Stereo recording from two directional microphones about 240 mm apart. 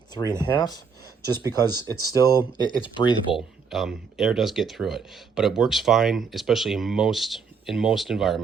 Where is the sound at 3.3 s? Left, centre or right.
Centre.